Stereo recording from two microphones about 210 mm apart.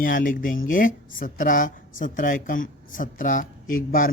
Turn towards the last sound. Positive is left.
turn(degrees=40)  # may be behind; listen again after turning